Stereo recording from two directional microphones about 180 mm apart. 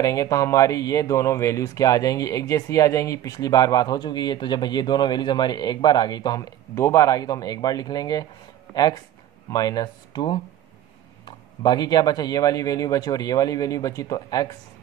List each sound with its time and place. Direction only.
0.0 s speech: 20° left (ahead or behind)
8.7 s speech: centre (ahead or behind)
9.5 s speech: 20° left (ahead or behind)